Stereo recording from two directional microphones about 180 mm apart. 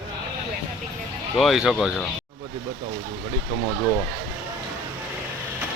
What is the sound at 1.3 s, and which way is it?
Speech, centre (ahead or behind).